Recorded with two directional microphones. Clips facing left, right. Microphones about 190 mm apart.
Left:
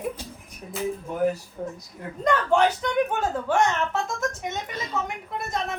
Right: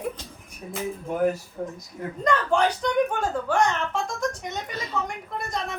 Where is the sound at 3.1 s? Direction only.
5° left (ahead or behind).